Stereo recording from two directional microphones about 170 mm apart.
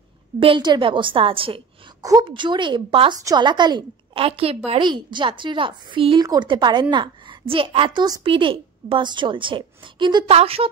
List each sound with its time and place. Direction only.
0.4 s a woman's voice: 30° right (ahead or behind)